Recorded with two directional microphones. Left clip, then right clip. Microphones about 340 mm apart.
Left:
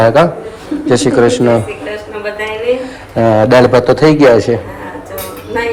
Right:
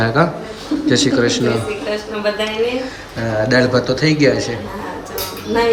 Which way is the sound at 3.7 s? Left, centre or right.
Centre.